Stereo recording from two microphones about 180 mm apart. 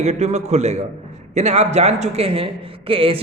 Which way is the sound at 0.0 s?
40° right (ahead or behind).